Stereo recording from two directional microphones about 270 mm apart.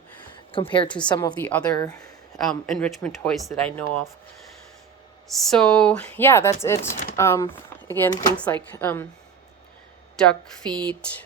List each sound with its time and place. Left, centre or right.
0.5 s a woman's voice: centre
2.5 s speech: centre
5.3 s a woman's voice: centre
10.2 s speech: centre